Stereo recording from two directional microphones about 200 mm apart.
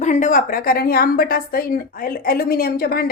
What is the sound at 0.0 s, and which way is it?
A woman's voice, 40° left (ahead or behind).